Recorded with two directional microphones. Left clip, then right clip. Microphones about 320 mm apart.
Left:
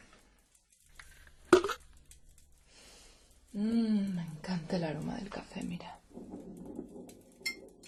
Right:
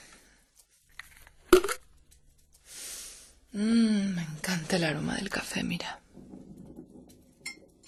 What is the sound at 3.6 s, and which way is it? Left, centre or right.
Speech, right.